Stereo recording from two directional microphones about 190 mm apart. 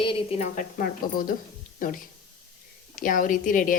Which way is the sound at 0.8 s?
50° left (ahead or behind).